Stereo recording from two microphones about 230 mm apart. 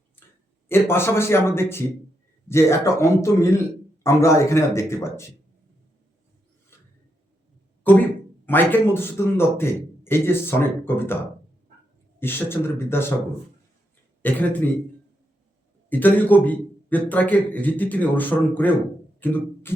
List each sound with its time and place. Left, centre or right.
0.2 s a sound: centre
0.7 s a man's voice: centre
7.9 s a man's voice: centre
12.2 s a man's voice: centre
14.2 s speech: centre
15.9 s a man's voice: centre
19.2 s beatboxing: centre